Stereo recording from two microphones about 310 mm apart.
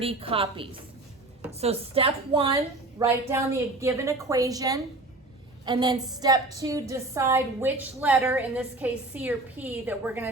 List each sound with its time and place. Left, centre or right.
0.0 s a woman's voice: centre